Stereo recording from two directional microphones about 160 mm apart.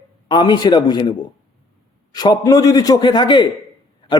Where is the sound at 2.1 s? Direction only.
25° left (ahead or behind).